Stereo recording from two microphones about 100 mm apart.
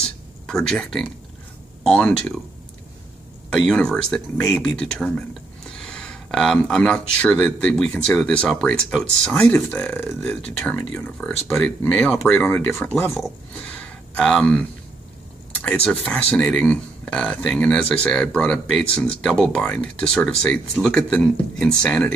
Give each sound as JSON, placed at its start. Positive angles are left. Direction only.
{"t": 0.0, "sound": "a sound", "side_deg": 5}
{"t": 1.8, "sound": "speech", "side_deg": 10}
{"t": 3.6, "sound": "speech", "side_deg": 5}
{"t": 12.6, "sound": "speech", "side_deg": 25}
{"t": 13.5, "sound": "a sound", "side_deg": 15}
{"t": 15.6, "sound": "speech", "side_deg": 10}